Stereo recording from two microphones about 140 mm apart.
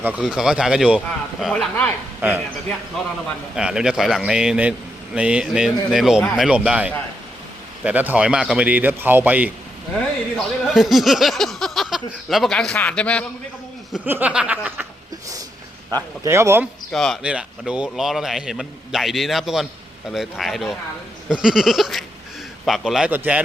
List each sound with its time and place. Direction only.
0.2 s speech: 5° right (ahead or behind)
2.2 s speech: 15° right (ahead or behind)
3.5 s speech: 5° right (ahead or behind)
13.9 s speech: 10° right (ahead or behind)
15.9 s speech: 25° right (ahead or behind)
16.9 s speech: centre (ahead or behind)